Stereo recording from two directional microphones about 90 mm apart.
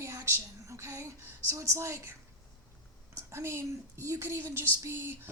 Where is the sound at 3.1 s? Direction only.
30° right (ahead or behind).